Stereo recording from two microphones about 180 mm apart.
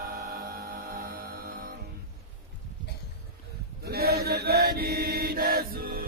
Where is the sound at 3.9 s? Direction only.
60° right (ahead or behind).